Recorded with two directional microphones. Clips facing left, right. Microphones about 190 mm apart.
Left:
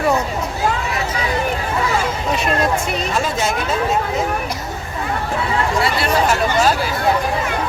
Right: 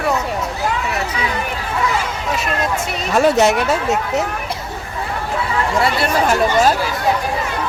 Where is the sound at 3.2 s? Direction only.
65° right (ahead or behind).